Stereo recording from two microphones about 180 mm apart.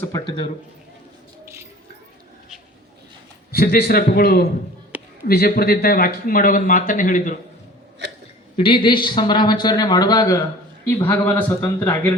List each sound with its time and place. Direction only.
0.3 s speech: 25° left (ahead or behind)
3.5 s a man's voice: 60° left (ahead or behind)
4.9 s a sound: 10° right (ahead or behind)
5.3 s speech: 55° left (ahead or behind)
8.5 s speech: 25° left (ahead or behind)